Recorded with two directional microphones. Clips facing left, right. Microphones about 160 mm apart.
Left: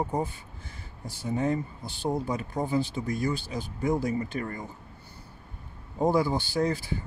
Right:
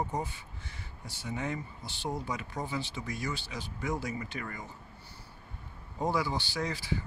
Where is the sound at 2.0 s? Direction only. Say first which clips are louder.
Left 7 dB; 50° left (ahead or behind).